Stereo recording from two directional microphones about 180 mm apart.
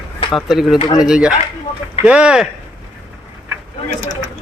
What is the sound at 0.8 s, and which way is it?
Speech, 25° left (ahead or behind).